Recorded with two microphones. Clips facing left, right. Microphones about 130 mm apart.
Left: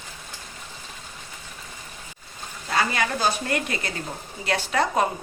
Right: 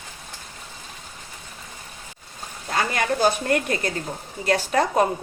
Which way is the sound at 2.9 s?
45° right (ahead or behind).